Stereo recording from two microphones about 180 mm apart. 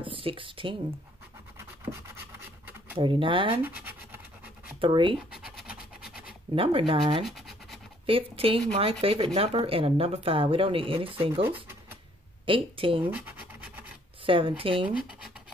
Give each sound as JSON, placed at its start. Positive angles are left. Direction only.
{"t": 0.0, "sound": "speech", "side_deg": -30}
{"t": 3.0, "sound": "speech", "side_deg": -30}
{"t": 3.5, "sound": "scratch", "side_deg": -10}
{"t": 4.7, "sound": "speech", "side_deg": -30}
{"t": 5.3, "sound": "a sound", "side_deg": -5}
{"t": 6.5, "sound": "speech", "side_deg": -30}
{"t": 7.2, "sound": "scratch", "side_deg": 0}
{"t": 8.1, "sound": "speech", "side_deg": -30}
{"t": 12.4, "sound": "speech", "side_deg": -30}
{"t": 13.0, "sound": "scratch", "side_deg": -10}
{"t": 14.2, "sound": "speech", "side_deg": -30}